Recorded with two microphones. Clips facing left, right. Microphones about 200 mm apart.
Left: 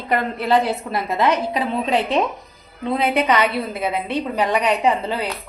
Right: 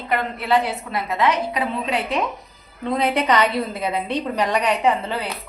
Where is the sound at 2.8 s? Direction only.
10° left (ahead or behind).